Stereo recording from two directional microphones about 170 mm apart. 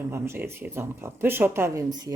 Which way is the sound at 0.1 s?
15° right (ahead or behind).